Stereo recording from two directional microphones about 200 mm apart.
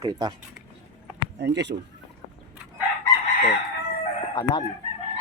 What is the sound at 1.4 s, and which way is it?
Speech, 60° right (ahead or behind).